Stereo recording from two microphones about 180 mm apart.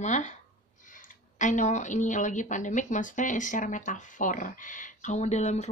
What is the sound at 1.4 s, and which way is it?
Speech, 45° left (ahead or behind).